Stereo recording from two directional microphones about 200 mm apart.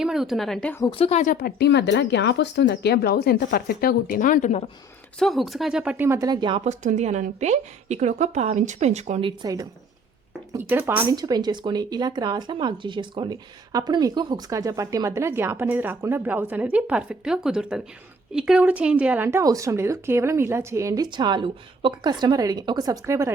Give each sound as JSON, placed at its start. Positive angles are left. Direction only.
{"t": 0.0, "sound": "a woman's voice", "side_deg": 0}
{"t": 0.9, "sound": "speech", "side_deg": 30}
{"t": 1.4, "sound": "speech", "side_deg": 55}
{"t": 5.2, "sound": "a woman's voice", "side_deg": 0}
{"t": 6.7, "sound": "a woman's voice", "side_deg": -35}
{"t": 9.4, "sound": "speech", "side_deg": -15}